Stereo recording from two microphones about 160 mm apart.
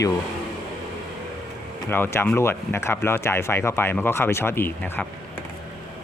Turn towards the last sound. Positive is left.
turn(degrees=10)  # may be behind; listen again after turning